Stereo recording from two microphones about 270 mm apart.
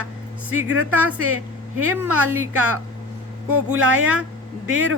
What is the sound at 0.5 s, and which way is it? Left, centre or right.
Speech, right.